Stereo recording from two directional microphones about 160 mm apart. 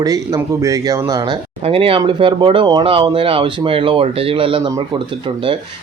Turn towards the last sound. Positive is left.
turn(degrees=-35)  # may be behind; listen again after turning